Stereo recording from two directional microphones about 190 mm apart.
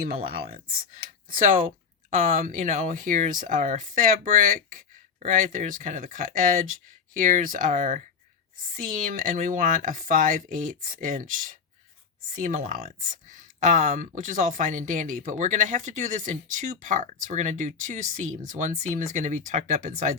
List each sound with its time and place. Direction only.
0.0 s speech: 55° right (ahead or behind)